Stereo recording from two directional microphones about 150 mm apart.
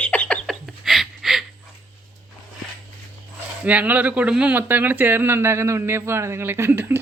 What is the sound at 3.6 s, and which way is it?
Speech, 10° right (ahead or behind).